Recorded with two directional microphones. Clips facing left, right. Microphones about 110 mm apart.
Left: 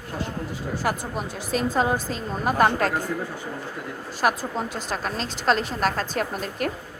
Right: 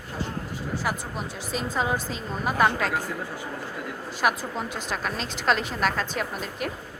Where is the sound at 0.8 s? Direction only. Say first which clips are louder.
Left 5 dB; 45° left (ahead or behind).